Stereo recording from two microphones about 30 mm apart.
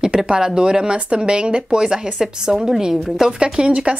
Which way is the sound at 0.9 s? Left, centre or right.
Right.